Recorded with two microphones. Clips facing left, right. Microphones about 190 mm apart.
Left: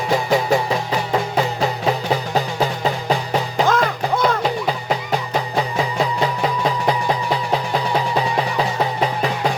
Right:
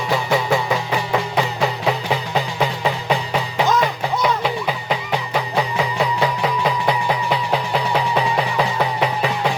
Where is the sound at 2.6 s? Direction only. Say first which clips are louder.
Even; 40° left (ahead or behind).